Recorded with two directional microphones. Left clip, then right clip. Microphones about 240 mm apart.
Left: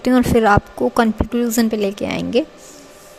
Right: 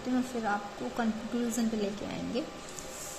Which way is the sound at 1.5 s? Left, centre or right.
Left.